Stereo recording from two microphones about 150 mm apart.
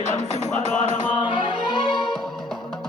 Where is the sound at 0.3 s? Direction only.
50° left (ahead or behind).